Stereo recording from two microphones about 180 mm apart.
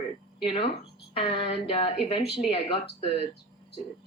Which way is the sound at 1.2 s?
30° left (ahead or behind).